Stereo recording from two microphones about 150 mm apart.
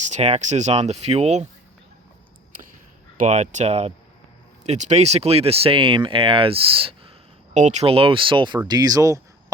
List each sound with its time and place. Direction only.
0.0 s speech: 50° right (ahead or behind)
3.2 s speech: 55° right (ahead or behind); by 7.1 s 35° right (ahead or behind)
7.5 s speech: 50° right (ahead or behind); by 9.2 s 20° right (ahead or behind)